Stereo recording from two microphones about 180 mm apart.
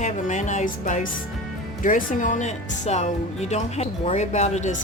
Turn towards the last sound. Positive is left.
turn(degrees=40)  # may be behind; listen again after turning